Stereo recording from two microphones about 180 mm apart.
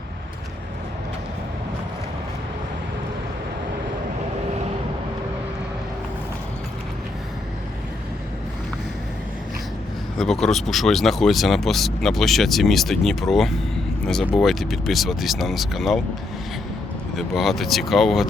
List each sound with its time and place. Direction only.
10.2 s speech: centre (ahead or behind)
17.2 s speech: centre (ahead or behind)